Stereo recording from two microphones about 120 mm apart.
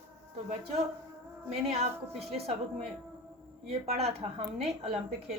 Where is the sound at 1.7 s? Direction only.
60° right (ahead or behind).